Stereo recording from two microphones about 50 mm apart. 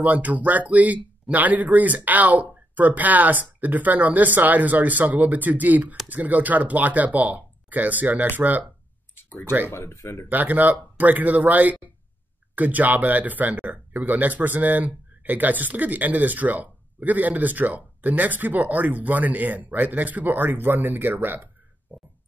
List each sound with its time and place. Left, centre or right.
0.0 s speech: right
9.7 s speech: left
9.9 s speech: left
10.3 s speech: right
21.9 s music: right